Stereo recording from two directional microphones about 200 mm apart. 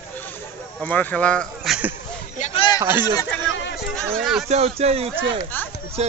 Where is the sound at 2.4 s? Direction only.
35° left (ahead or behind).